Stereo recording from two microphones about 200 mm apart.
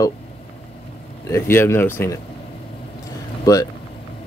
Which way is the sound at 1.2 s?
10° left (ahead or behind).